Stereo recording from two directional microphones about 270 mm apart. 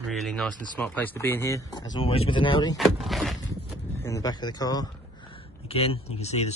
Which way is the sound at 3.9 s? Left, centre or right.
Centre.